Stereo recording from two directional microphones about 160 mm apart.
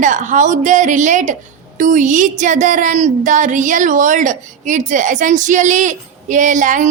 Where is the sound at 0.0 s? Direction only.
50° right (ahead or behind).